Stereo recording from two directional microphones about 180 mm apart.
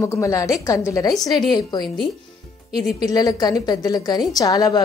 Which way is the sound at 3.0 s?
20° left (ahead or behind).